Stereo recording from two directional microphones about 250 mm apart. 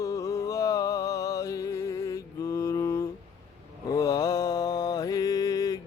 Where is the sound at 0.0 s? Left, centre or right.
Centre.